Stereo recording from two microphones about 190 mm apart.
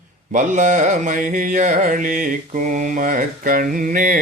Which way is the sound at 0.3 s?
40° right (ahead or behind).